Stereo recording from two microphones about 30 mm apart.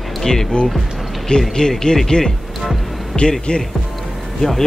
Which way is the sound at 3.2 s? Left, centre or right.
Left.